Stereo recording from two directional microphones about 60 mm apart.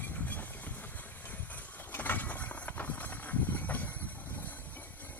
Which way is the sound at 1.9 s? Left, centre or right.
Left.